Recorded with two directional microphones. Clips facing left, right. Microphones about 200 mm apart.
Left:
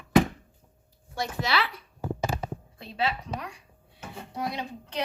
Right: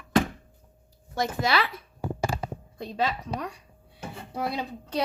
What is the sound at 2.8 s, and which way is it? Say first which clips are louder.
Speech: right 2 dB; 40° right (ahead or behind).